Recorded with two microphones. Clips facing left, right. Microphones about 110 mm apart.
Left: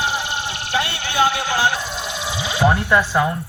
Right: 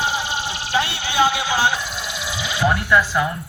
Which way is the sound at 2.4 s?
25° left (ahead or behind).